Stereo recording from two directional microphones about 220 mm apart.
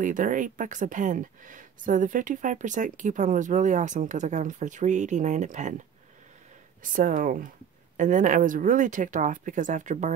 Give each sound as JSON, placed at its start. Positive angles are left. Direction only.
{"t": 0.0, "sound": "speech", "side_deg": -35}
{"t": 6.8, "sound": "speech", "side_deg": -35}